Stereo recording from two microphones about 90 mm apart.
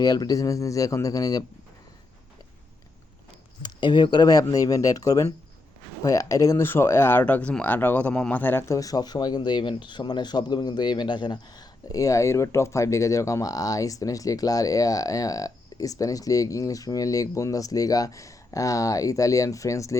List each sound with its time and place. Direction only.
0.0 s speech: 45° left (ahead or behind)
3.6 s speech: 60° left (ahead or behind); by 8.6 s 20° left (ahead or behind)
8.6 s speech: 35° left (ahead or behind)